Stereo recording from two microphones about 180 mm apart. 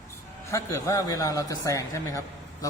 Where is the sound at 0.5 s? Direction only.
15° left (ahead or behind).